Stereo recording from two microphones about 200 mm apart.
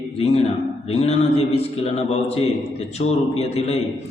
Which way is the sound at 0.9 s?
30° left (ahead or behind).